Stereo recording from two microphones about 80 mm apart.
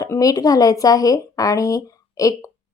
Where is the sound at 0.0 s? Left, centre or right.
Left.